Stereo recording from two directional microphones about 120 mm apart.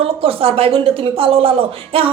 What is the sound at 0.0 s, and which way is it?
A woman's voice, 50° right (ahead or behind).